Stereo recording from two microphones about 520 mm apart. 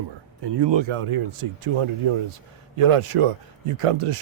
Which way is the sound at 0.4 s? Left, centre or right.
Right.